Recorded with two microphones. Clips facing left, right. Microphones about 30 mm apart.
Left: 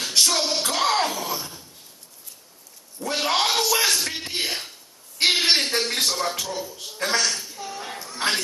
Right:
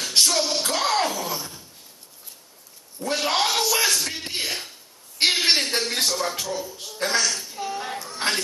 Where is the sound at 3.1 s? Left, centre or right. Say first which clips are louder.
Even; centre.